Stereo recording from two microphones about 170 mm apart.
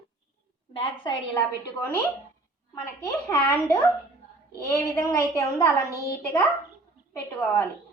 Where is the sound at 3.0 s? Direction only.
20° left (ahead or behind).